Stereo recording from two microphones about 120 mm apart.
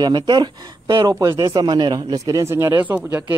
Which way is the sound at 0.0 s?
35° right (ahead or behind).